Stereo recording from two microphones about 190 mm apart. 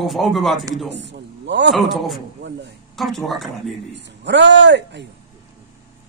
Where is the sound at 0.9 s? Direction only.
65° right (ahead or behind).